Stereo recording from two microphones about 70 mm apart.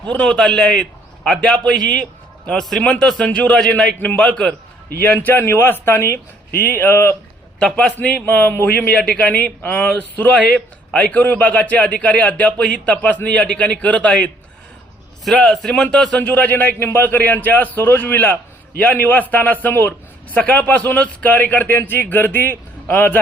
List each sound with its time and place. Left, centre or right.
0.1 s a man's voice: centre
4.9 s a man's voice: left
7.6 s a man's voice: centre
15.2 s a man's voice: centre
16.1 s speech: left